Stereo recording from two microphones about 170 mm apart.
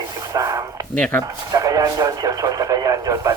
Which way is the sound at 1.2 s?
20° right (ahead or behind).